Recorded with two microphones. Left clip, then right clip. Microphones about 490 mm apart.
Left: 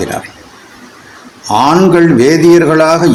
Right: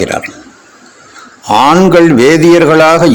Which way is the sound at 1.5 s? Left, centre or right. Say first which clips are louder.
Right 2 dB; left.